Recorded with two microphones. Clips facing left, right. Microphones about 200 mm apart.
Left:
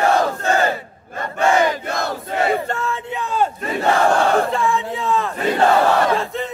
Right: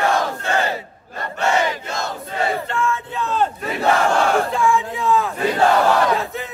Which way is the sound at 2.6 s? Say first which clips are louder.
Right 1 dB; 40° left (ahead or behind).